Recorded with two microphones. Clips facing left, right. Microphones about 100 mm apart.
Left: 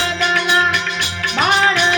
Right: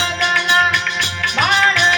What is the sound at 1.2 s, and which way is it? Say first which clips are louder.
Music: left 1 dB; 35° left (ahead or behind).